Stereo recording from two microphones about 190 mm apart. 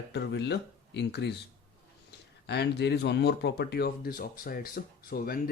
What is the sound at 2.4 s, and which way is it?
Speech, 60° left (ahead or behind).